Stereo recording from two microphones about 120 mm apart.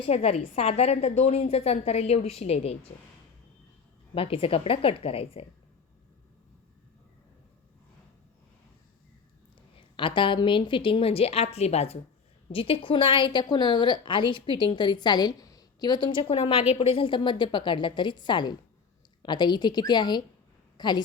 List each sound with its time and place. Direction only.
0.1 s a woman's voice: 55° left (ahead or behind)
4.1 s a woman's voice: 50° left (ahead or behind)
10.0 s a woman's voice: 45° left (ahead or behind); by 11.9 s 60° left (ahead or behind)
12.5 s a woman's voice: 50° left (ahead or behind)
16.4 s a woman's voice: 55° left (ahead or behind); by 21.0 s 35° left (ahead or behind)